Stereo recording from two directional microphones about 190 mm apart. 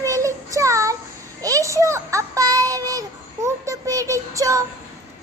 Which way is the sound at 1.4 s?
15° right (ahead or behind).